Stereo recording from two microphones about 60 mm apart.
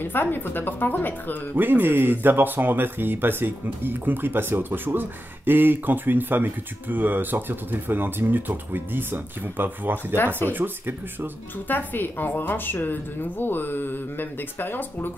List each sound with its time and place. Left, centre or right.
0.0 s a woman's voice: left
1.6 s speech: right
10.1 s a woman's voice: left
10.5 s speech: right
11.5 s a woman's voice: left